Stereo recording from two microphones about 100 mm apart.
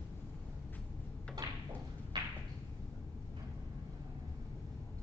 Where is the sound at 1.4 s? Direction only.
30° right (ahead or behind).